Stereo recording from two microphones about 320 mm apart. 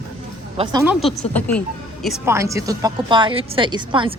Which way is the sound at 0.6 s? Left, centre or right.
Centre.